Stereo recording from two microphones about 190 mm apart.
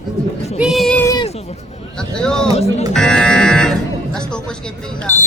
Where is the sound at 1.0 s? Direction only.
20° left (ahead or behind).